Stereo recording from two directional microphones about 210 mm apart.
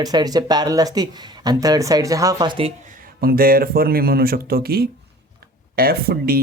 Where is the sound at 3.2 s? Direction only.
45° right (ahead or behind).